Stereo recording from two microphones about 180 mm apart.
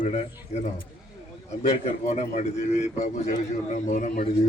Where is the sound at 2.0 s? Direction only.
40° left (ahead or behind).